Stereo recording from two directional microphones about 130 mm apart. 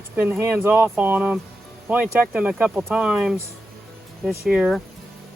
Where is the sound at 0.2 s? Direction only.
15° right (ahead or behind).